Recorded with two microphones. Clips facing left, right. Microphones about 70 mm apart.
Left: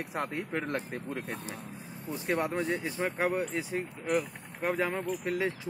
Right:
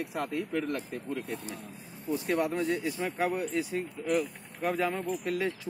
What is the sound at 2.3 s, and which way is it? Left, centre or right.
Speech, left.